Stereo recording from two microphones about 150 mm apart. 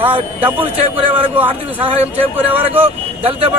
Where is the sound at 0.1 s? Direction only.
35° right (ahead or behind).